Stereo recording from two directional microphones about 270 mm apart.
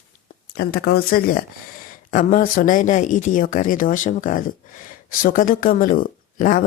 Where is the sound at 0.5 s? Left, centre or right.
Left.